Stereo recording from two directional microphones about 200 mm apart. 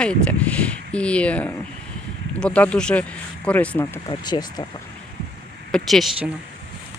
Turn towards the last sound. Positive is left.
turn(degrees=0)  # may be behind; listen again after turning